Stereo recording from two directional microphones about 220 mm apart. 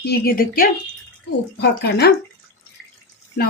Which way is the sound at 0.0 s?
45° left (ahead or behind).